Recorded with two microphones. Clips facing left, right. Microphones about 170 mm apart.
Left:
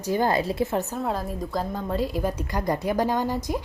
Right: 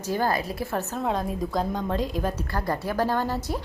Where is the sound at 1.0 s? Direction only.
Centre (ahead or behind).